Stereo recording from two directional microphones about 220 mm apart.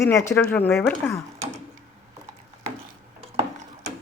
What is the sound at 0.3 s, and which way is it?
Speech, 10° left (ahead or behind).